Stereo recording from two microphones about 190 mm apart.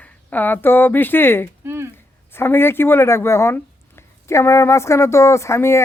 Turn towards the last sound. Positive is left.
turn(degrees=15)  # may be behind; listen again after turning